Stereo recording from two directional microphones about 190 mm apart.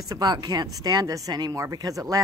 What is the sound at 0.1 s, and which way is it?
A woman's voice, 20° right (ahead or behind).